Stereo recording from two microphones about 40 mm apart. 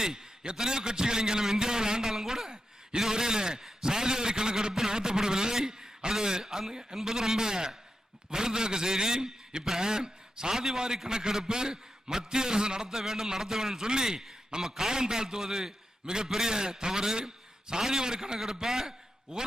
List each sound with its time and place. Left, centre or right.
0.0 s a man's voice: centre